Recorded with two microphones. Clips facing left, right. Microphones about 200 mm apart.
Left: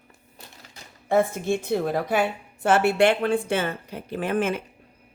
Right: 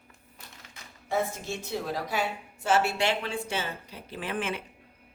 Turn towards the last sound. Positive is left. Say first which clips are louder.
# left 8 dB
turn(degrees=45)  # may be behind; listen again after turning